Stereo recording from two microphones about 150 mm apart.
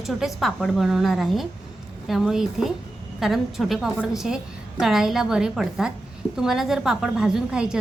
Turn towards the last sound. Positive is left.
turn(degrees=-5)  # may be behind; listen again after turning